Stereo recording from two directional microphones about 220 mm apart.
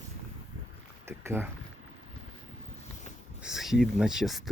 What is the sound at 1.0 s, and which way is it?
Speech, 10° right (ahead or behind).